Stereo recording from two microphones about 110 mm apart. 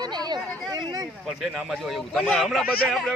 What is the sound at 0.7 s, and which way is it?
Speech, 35° right (ahead or behind).